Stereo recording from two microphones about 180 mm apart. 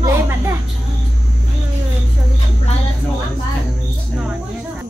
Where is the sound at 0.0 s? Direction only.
15° right (ahead or behind).